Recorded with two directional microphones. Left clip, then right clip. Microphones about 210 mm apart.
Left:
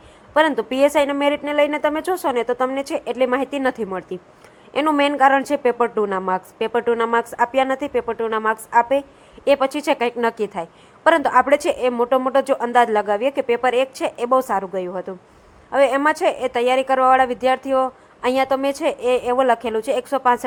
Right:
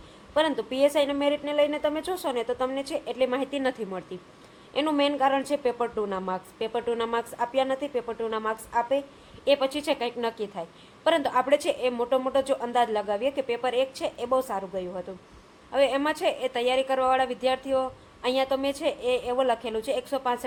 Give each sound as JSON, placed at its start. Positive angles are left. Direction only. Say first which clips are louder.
{"t": 0.3, "sound": "a woman's voice", "louder": "left 8 dB", "side_deg": 20}